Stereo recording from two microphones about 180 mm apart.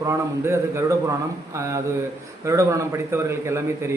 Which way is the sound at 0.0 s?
15° right (ahead or behind).